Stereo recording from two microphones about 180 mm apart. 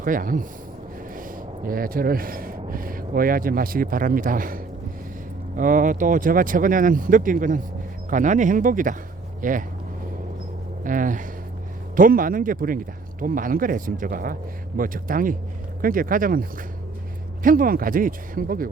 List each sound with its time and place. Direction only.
0.0 s speech: 50° right (ahead or behind)
1.6 s speech: 55° right (ahead or behind)
10.8 s speech: 45° right (ahead or behind)